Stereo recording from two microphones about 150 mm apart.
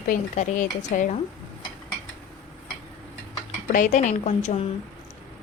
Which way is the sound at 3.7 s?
55° left (ahead or behind).